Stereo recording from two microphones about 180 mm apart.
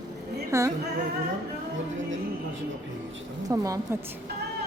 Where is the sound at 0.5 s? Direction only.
15° right (ahead or behind).